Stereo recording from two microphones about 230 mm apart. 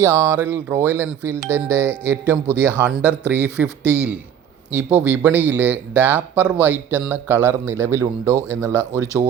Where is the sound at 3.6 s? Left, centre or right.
Centre.